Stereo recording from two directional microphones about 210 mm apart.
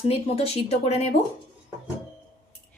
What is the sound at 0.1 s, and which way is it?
Speech, 25° left (ahead or behind).